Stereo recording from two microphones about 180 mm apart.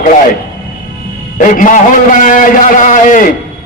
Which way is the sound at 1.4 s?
45° left (ahead or behind).